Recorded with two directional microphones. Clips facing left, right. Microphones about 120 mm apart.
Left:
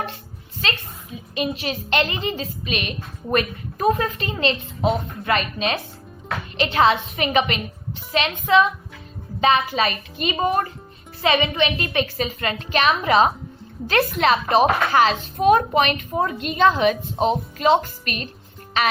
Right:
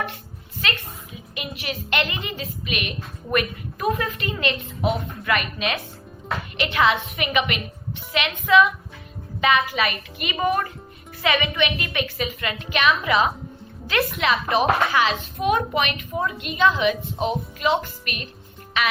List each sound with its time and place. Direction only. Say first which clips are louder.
0.6 s a woman's voice: left 1 dB; 30° left (ahead or behind)